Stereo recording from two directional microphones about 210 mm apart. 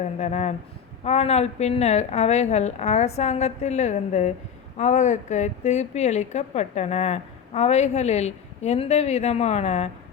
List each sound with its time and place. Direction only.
0.0 s a woman's voice: 35° left (ahead or behind)